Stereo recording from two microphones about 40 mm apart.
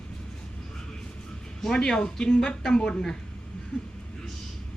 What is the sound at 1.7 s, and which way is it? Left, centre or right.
Speech, left.